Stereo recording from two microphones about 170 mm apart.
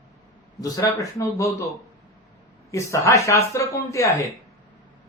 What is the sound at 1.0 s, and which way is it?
Speech, 20° left (ahead or behind).